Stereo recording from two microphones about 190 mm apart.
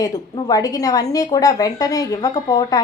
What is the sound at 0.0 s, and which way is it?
A woman's voice, 20° left (ahead or behind).